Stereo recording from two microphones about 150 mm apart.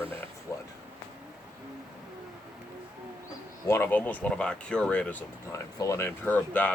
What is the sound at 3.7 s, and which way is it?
Speech, 15° left (ahead or behind).